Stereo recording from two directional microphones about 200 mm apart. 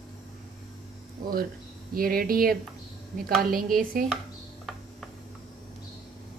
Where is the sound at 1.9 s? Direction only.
45° right (ahead or behind).